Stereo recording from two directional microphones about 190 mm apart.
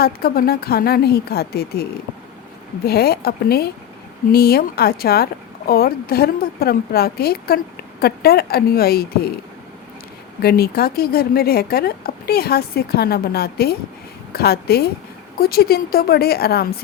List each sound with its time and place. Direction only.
0.0 s a woman's voice: 55° left (ahead or behind)
10.4 s a woman's voice: 55° left (ahead or behind)